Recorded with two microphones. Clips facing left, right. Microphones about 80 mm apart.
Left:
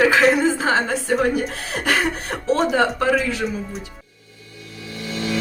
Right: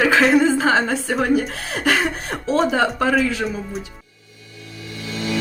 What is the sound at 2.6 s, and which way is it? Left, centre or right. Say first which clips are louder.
Speech: even; right.